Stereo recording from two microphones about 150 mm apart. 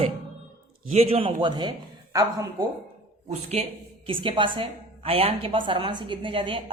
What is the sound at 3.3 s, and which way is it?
A woman's voice, 45° right (ahead or behind).